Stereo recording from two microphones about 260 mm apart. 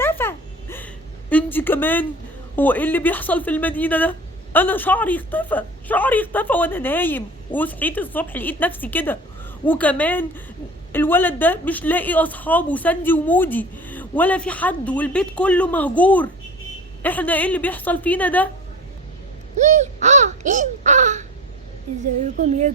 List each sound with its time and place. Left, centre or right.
0.0 s a sound: centre
1.3 s a woman's voice: centre
19.5 s speech: right
22.4 s speech: right